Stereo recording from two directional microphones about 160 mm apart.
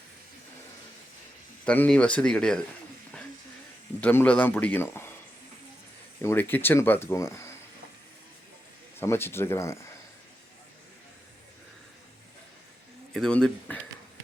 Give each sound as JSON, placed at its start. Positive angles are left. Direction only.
{"t": 1.6, "sound": "speech", "side_deg": 10}
{"t": 4.0, "sound": "speech", "side_deg": 10}
{"t": 6.2, "sound": "speech", "side_deg": 15}
{"t": 9.0, "sound": "speech", "side_deg": 15}
{"t": 13.1, "sound": "speech", "side_deg": 5}